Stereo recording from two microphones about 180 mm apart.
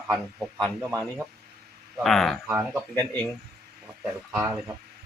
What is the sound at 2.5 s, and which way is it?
Speech, 10° right (ahead or behind).